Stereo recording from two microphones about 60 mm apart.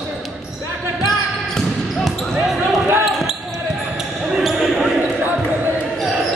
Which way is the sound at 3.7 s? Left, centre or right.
Centre.